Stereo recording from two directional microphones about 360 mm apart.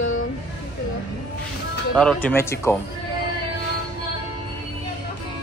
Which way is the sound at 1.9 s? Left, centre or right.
Centre.